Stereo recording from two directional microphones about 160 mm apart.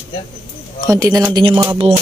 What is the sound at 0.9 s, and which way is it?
Speech, 20° right (ahead or behind).